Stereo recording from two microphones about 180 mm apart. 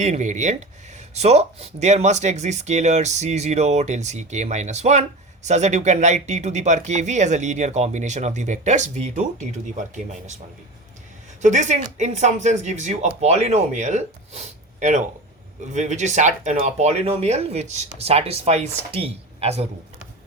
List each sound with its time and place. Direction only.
0.0 s speech: 40° right (ahead or behind)
11.4 s speech: 40° right (ahead or behind)